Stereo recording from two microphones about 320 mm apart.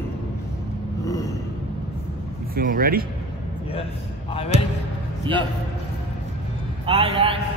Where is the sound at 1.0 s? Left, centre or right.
Centre.